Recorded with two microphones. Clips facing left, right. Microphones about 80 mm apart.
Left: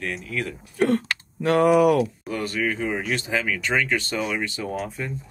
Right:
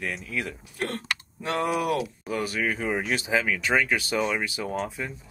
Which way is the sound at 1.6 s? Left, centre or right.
Left.